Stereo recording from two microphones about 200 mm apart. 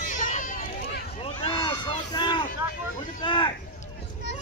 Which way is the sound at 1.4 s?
25° left (ahead or behind).